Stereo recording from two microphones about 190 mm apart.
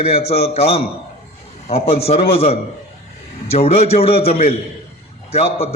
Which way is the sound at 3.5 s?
30° left (ahead or behind).